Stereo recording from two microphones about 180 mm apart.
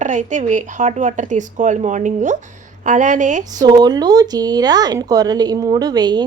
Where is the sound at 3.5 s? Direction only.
20° right (ahead or behind).